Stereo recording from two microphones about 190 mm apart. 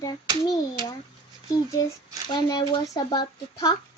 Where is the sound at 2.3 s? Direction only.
20° left (ahead or behind).